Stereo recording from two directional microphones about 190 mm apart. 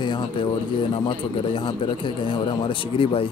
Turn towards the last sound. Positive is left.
turn(degrees=30)  # may be behind; listen again after turning